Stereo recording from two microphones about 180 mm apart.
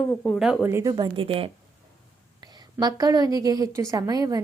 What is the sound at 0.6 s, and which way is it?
Speech, 15° right (ahead or behind).